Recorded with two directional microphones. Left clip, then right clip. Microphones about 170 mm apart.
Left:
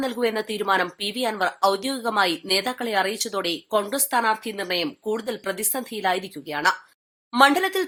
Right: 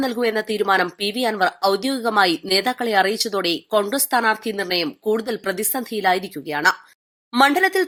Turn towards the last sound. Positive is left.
turn(degrees=-20)  # may be behind; listen again after turning